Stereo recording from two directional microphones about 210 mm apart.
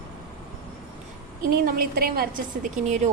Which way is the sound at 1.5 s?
45° right (ahead or behind).